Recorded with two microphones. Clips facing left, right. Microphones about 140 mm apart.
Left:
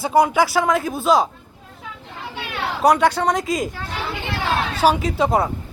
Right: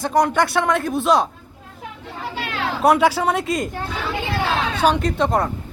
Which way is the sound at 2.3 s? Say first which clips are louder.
Right 1 dB; 90° right.